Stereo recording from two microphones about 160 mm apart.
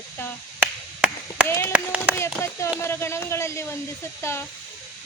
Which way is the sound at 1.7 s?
10° right (ahead or behind).